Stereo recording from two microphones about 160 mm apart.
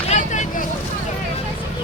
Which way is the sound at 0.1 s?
50° left (ahead or behind).